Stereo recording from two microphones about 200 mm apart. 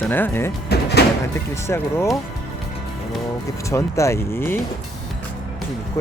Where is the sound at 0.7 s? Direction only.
55° left (ahead or behind).